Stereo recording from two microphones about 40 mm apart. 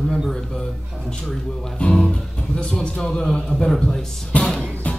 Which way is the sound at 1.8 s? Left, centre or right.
Left.